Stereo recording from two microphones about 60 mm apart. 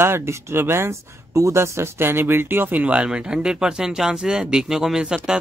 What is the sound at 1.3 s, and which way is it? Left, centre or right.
Speech, right.